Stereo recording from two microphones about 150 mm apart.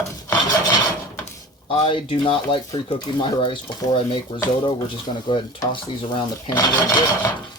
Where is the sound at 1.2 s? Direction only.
45° left (ahead or behind).